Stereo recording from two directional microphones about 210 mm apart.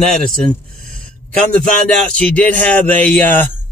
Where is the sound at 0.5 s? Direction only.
40° right (ahead or behind).